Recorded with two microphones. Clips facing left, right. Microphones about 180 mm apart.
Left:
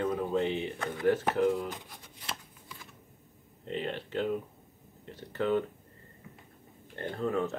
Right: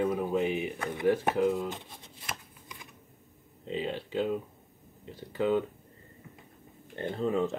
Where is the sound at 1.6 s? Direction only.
25° right (ahead or behind).